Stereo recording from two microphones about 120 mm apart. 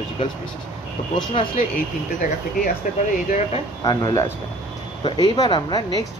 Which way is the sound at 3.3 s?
80° left.